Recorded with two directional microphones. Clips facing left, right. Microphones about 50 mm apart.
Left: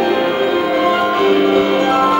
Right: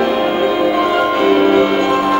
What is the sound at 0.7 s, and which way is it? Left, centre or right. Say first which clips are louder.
Music: even; centre.